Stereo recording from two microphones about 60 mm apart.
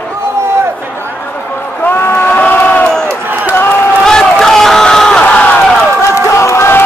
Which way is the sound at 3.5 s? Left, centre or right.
Left.